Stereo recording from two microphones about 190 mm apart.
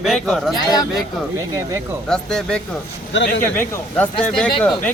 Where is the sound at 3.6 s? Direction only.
10° left (ahead or behind).